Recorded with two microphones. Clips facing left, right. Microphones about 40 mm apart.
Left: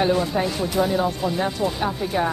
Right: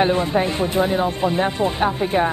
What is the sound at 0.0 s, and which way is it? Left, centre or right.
Speech, right.